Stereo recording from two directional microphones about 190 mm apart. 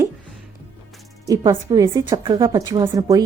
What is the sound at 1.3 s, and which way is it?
A woman's voice, 20° right (ahead or behind).